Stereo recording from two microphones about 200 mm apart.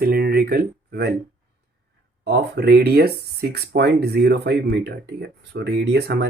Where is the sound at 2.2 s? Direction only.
55° right (ahead or behind).